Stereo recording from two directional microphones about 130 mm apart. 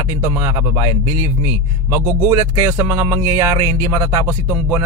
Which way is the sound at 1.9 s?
20° right (ahead or behind).